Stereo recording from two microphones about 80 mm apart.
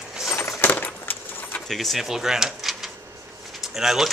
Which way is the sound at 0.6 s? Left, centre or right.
Left.